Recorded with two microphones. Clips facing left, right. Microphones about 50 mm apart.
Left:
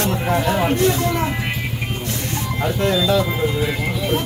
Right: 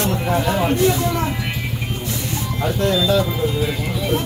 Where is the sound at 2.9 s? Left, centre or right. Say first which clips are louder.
Even; centre.